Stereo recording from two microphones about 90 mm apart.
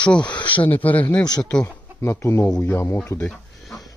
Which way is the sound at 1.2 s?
50° left (ahead or behind).